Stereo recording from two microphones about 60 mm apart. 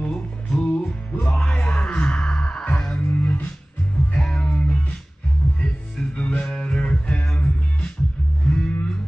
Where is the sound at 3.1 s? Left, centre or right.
Left.